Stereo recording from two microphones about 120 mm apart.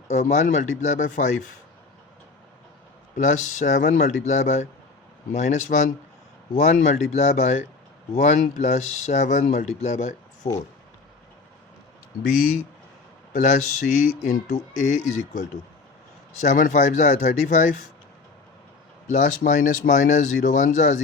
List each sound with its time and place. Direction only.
0.1 s speech: 75° left (ahead or behind)
3.2 s speech: 90° left
6.5 s speech: 75° left (ahead or behind)
13.4 s speech: 90° left
19.0 s speech: 90° left